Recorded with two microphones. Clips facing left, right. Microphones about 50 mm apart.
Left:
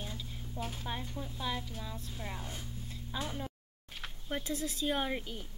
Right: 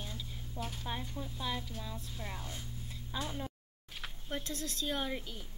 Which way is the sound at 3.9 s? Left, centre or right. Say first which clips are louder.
Left 1 dB; centre.